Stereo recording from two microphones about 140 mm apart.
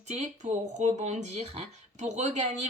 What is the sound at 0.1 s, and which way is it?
Speech, 55° right (ahead or behind).